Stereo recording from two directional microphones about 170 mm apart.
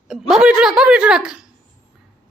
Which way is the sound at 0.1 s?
5° right (ahead or behind).